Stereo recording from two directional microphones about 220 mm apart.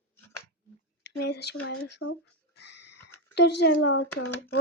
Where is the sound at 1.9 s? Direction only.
70° left (ahead or behind).